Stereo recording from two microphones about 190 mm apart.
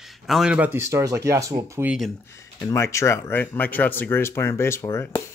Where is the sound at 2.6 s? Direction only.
15° left (ahead or behind).